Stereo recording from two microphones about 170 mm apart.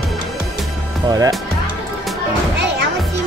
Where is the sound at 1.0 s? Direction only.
20° right (ahead or behind).